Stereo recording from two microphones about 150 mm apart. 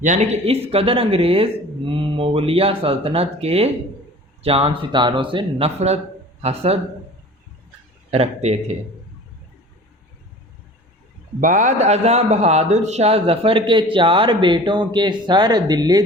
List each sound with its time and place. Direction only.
0.0 s speech: 50° right (ahead or behind)
8.1 s speech: 45° right (ahead or behind)
11.3 s speech: 60° right (ahead or behind); by 16.0 s 25° right (ahead or behind)